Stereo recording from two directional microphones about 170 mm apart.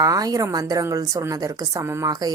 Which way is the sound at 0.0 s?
20° right (ahead or behind).